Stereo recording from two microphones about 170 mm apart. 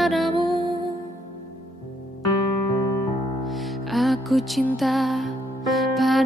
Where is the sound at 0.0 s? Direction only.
Centre (ahead or behind).